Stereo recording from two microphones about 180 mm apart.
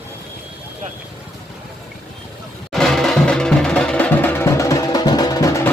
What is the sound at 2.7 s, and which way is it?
Music, centre (ahead or behind).